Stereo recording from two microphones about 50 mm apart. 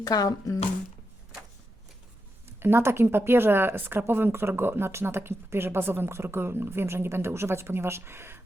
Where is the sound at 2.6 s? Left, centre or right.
Right.